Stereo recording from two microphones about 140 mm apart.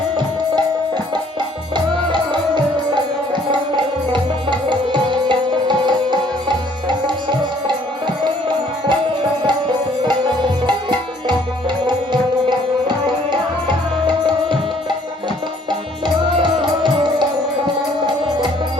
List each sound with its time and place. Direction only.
1.7 s music: 35° right (ahead or behind)
10.1 s music: 35° right (ahead or behind)
13.7 s music: 35° right (ahead or behind)
16.0 s music: 35° right (ahead or behind)